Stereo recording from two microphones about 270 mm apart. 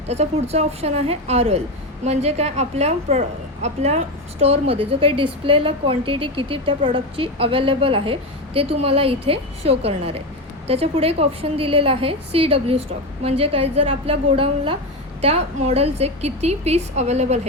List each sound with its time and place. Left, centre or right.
0.1 s a woman's voice: right